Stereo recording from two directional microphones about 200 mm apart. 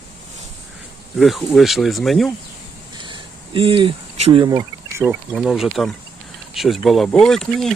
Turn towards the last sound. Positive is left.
turn(degrees=0)  # may be behind; listen again after turning